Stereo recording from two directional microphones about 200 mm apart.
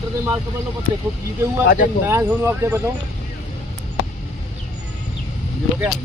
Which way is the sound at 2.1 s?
15° right (ahead or behind).